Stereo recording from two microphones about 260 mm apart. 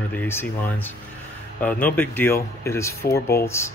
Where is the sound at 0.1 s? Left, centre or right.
Centre.